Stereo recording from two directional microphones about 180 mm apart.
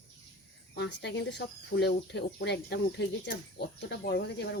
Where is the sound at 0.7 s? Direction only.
75° left (ahead or behind).